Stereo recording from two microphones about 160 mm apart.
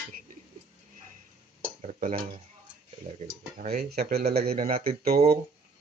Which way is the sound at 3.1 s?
40° right (ahead or behind).